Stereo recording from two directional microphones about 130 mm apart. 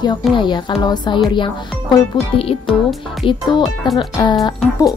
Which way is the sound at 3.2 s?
40° left (ahead or behind).